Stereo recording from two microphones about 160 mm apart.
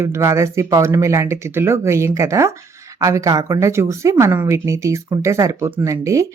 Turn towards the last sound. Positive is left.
turn(degrees=-20)  # may be behind; listen again after turning